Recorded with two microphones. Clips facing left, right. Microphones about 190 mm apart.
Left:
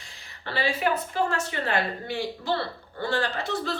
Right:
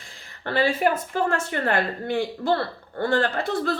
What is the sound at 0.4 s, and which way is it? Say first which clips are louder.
A woman's voice: right 5 dB; 50° right (ahead or behind).